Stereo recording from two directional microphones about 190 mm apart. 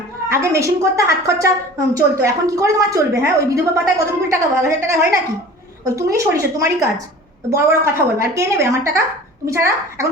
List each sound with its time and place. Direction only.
0.3 s a woman's voice: 15° right (ahead or behind)